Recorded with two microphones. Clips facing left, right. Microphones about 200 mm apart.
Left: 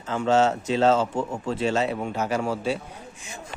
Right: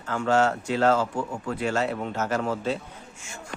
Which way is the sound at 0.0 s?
20° left (ahead or behind).